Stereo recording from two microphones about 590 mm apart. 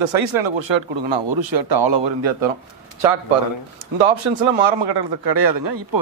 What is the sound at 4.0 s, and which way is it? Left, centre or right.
Speech, right.